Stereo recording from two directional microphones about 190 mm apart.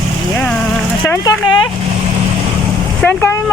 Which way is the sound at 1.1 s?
20° left (ahead or behind).